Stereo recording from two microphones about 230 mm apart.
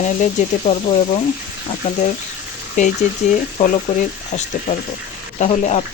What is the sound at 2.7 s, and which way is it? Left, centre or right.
Speech, left.